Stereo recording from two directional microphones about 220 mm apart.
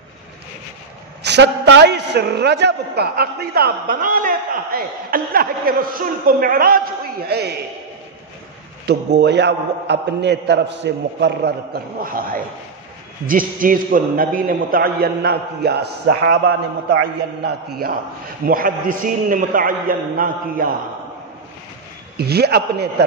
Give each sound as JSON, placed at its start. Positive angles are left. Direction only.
{"t": 1.2, "sound": "a man's voice", "side_deg": -50}
{"t": 8.8, "sound": "a man's voice", "side_deg": -50}
{"t": 22.1, "sound": "a man's voice", "side_deg": -45}